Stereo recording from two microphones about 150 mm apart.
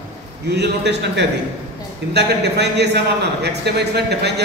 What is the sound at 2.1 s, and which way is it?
A man's voice, 90° right.